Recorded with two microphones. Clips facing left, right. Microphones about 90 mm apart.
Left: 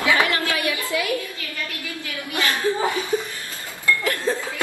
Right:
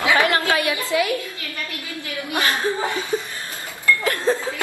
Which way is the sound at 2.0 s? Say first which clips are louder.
Right 2 dB; 25° right (ahead or behind).